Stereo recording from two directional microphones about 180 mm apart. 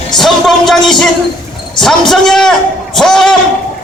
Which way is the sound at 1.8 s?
Centre (ahead or behind).